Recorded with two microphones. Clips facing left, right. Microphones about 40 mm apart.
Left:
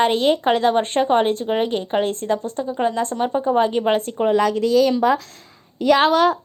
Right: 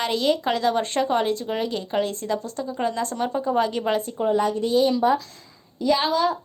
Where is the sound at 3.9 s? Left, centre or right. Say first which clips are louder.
Left 4 dB; left.